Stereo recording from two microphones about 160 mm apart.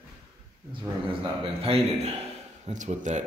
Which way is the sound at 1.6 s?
40° right (ahead or behind).